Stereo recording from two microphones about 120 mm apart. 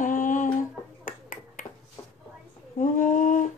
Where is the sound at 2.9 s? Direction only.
90° left.